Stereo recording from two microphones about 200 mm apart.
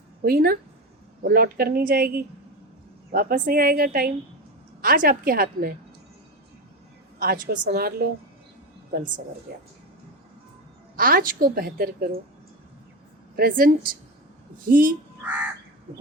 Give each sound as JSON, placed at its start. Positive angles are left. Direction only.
{"t": 0.3, "sound": "a woman's voice", "side_deg": -50}
{"t": 7.2, "sound": "a woman's voice", "side_deg": -50}
{"t": 9.5, "sound": "a woman's voice", "side_deg": -45}
{"t": 10.9, "sound": "a woman's voice", "side_deg": -45}
{"t": 13.3, "sound": "a woman's voice", "side_deg": -50}
{"t": 14.7, "sound": "a woman's voice", "side_deg": -45}
{"t": 15.2, "sound": "crow", "side_deg": -5}